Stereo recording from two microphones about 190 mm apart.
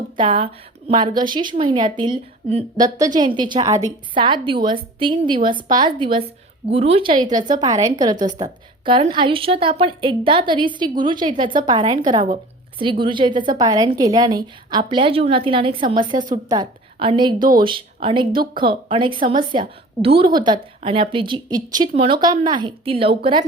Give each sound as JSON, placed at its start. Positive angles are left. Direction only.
{"t": 0.2, "sound": "a woman's voice", "side_deg": -30}